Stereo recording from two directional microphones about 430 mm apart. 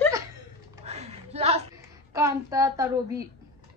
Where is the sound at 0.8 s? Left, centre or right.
Centre.